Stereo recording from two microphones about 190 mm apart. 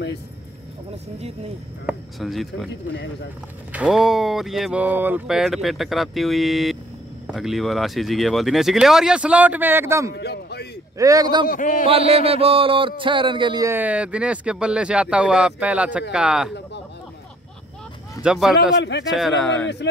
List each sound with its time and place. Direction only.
1.9 s speech: centre (ahead or behind)
3.7 s speech: 5° right (ahead or behind)
10.1 s a sound: 60° left (ahead or behind)
11.0 s a man's voice: 20° right (ahead or behind)
11.4 s speech: 45° left (ahead or behind)
11.8 s a sound: 30° right (ahead or behind); by 16.5 s 5° right (ahead or behind)
18.2 s speech: 5° right (ahead or behind)
18.8 s a man's voice: 65° left (ahead or behind)
19.0 s speech: centre (ahead or behind)